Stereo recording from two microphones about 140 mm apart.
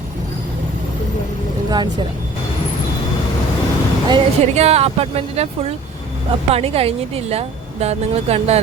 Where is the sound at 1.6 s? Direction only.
30° right (ahead or behind).